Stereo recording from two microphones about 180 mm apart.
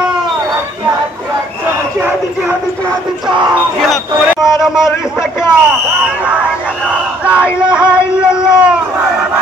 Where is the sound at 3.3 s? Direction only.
25° right (ahead or behind).